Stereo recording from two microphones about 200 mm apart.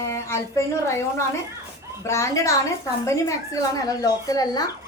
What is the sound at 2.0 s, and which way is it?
A woman's voice, 15° left (ahead or behind).